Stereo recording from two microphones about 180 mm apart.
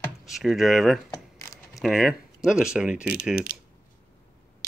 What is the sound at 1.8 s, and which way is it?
Speech, centre (ahead or behind).